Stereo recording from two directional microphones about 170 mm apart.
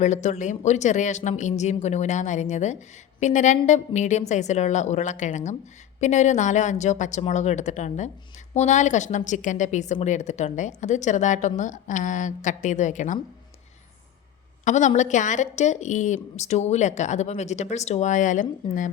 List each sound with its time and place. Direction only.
0.0 s a woman's voice: 45° left (ahead or behind)
14.6 s a woman's voice: 45° left (ahead or behind)